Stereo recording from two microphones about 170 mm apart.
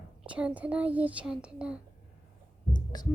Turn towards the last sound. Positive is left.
turn(degrees=25)  # may be behind; listen again after turning